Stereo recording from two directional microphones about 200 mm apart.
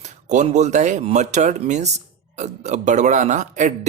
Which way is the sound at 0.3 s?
35° right (ahead or behind).